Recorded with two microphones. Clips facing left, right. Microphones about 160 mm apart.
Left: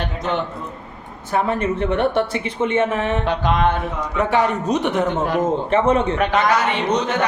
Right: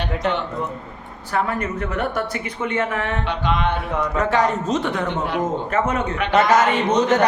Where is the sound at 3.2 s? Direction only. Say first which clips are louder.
Left 4 dB; 45° left (ahead or behind).